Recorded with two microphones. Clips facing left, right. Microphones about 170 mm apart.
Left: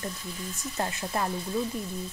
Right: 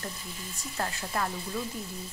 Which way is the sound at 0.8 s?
20° left (ahead or behind).